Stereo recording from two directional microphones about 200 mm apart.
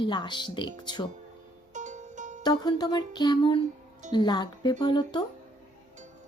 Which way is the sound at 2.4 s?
20° left (ahead or behind).